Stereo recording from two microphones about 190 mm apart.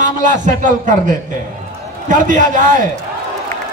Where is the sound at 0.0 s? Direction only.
40° right (ahead or behind).